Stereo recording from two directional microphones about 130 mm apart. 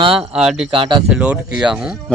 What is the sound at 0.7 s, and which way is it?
Speech, 40° right (ahead or behind).